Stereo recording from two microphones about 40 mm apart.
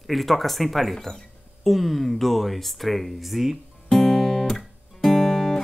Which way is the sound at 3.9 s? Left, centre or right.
Centre.